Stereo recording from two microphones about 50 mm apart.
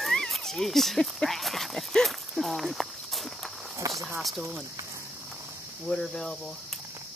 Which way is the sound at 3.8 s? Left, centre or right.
Right.